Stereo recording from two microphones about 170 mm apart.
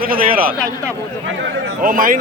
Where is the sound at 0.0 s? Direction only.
60° right (ahead or behind).